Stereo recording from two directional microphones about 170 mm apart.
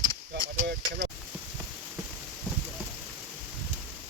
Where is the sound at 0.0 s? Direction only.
30° right (ahead or behind).